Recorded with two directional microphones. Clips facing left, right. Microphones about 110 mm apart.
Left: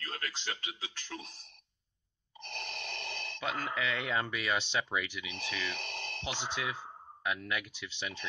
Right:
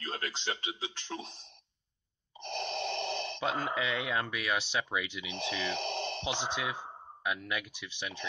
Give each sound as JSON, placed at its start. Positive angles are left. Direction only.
{"t": 0.0, "sound": "a man's voice", "side_deg": -25}
{"t": 2.4, "sound": "gasp", "side_deg": -20}
{"t": 4.1, "sound": "speech", "side_deg": -5}